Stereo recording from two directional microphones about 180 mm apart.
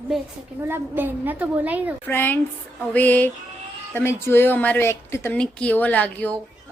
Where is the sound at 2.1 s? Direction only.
10° left (ahead or behind).